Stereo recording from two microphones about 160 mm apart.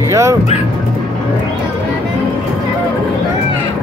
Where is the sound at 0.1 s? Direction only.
20° right (ahead or behind).